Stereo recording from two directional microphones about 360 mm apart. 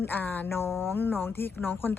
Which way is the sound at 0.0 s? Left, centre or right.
Centre.